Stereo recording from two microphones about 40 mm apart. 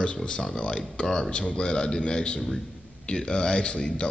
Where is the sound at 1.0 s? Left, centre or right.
Centre.